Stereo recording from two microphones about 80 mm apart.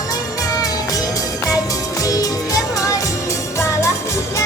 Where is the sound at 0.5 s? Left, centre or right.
Left.